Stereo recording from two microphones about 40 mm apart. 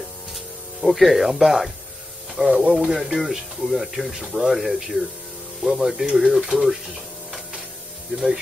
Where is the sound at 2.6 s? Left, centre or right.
Right.